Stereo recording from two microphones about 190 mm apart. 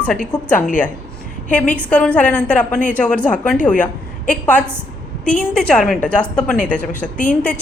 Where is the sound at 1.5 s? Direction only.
5° left (ahead or behind).